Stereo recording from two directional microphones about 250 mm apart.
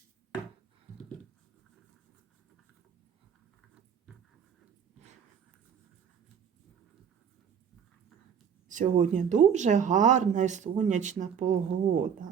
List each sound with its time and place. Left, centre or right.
8.7 s speech: right